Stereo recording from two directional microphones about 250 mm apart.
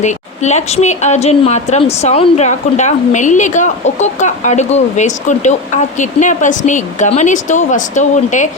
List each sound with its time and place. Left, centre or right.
0.0 s a woman's voice: left